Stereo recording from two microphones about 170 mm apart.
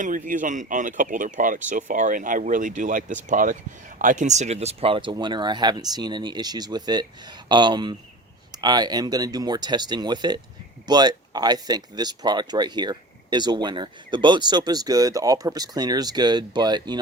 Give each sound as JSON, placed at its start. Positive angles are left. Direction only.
{"t": 0.0, "sound": "speech", "side_deg": -50}